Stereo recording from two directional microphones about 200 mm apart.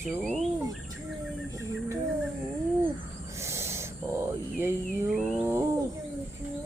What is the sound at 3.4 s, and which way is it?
Owl, 15° right (ahead or behind).